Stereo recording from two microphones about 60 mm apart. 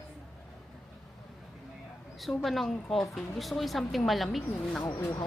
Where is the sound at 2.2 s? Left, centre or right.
Centre.